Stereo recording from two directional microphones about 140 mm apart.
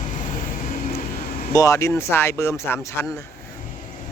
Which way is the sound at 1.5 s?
25° left (ahead or behind).